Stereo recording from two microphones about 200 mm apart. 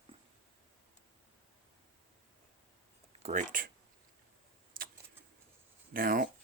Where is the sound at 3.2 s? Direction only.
40° right (ahead or behind).